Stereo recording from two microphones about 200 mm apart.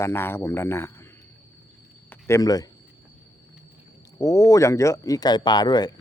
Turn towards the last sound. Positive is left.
turn(degrees=20)  # may be behind; listen again after turning